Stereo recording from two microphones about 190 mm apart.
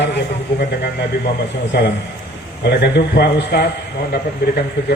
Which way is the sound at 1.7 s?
60° left (ahead or behind).